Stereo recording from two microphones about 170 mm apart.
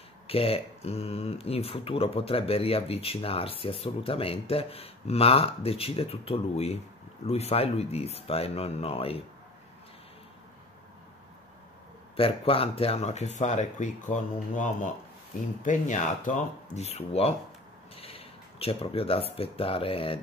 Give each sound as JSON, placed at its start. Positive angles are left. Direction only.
{"t": 0.3, "sound": "speech", "side_deg": 35}
{"t": 12.2, "sound": "speech", "side_deg": 35}
{"t": 16.7, "sound": "speech", "side_deg": 35}